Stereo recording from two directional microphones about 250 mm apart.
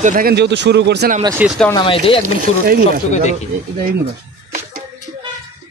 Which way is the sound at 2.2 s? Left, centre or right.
Right.